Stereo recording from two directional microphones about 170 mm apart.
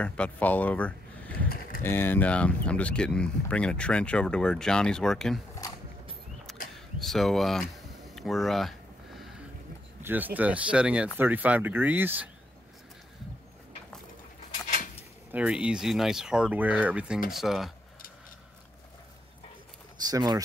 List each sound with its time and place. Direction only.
0.0 s speech: 10° left (ahead or behind)
7.0 s speech: centre (ahead or behind)
8.1 s a sound: centre (ahead or behind)
10.0 s speech: 10° right (ahead or behind)
15.3 s speech: 5° right (ahead or behind)
20.1 s speech: 25° right (ahead or behind)